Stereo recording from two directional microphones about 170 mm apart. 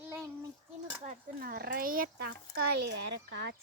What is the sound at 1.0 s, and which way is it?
A child's voice, 60° right (ahead or behind).